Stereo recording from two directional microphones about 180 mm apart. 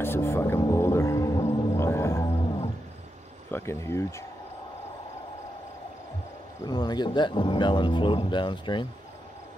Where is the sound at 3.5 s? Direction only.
15° left (ahead or behind).